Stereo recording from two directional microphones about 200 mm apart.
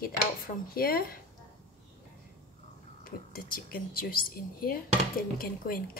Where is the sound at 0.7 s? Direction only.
50° left (ahead or behind).